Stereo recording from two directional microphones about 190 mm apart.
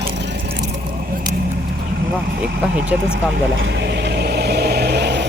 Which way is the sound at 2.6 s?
5° right (ahead or behind).